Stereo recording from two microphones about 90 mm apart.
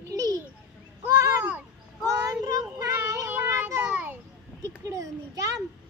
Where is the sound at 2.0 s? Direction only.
40° right (ahead or behind).